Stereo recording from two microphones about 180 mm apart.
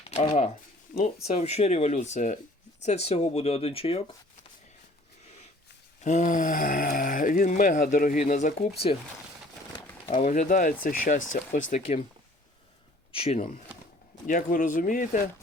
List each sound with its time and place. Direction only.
0.1 s speech: 35° left (ahead or behind)
6.0 s speech: 40° left (ahead or behind)
10.1 s speech: 45° left (ahead or behind)
11.7 s speech: 35° left (ahead or behind)
13.1 s speech: 30° left (ahead or behind)
14.3 s speech: 50° left (ahead or behind)